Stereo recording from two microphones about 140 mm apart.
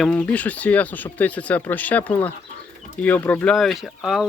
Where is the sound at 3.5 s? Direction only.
Centre (ahead or behind).